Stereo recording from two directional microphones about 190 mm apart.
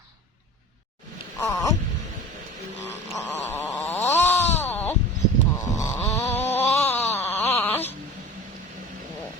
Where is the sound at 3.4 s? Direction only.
10° left (ahead or behind).